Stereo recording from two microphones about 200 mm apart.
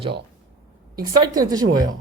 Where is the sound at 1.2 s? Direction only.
20° right (ahead or behind).